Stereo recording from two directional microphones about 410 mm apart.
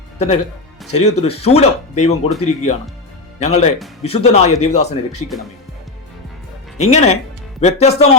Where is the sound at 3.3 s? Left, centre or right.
Centre.